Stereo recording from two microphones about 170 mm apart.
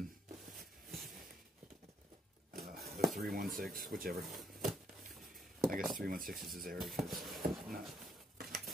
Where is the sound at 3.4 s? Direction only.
60° right (ahead or behind).